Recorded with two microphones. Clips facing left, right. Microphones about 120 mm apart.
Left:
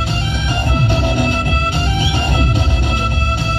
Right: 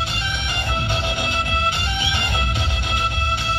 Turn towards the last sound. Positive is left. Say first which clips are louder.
# left 4 dB
turn(degrees=40)  # may be behind; listen again after turning